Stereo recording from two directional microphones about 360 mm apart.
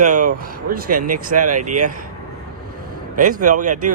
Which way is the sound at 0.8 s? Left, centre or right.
Right.